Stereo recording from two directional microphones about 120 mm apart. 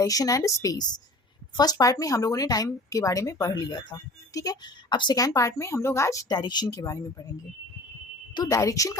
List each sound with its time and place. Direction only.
0.0 s speech: 30° left (ahead or behind)
8.4 s speech: 30° left (ahead or behind)